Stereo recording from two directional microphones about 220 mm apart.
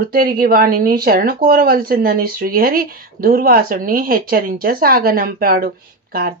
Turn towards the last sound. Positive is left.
turn(degrees=-45)  # may be behind; listen again after turning